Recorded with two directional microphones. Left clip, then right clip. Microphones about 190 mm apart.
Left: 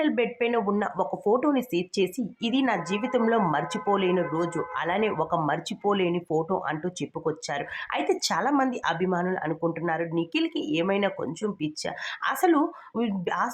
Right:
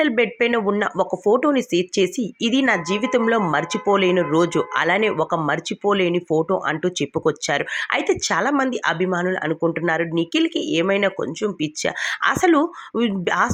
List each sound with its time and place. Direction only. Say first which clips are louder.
0.0 s speech: right 7 dB; 20° right (ahead or behind)